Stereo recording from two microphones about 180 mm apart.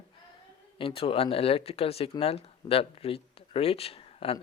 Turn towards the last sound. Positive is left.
turn(degrees=30)  # may be behind; listen again after turning